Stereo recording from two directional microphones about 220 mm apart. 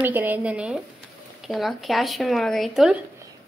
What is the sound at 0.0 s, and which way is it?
Speech, 10° right (ahead or behind).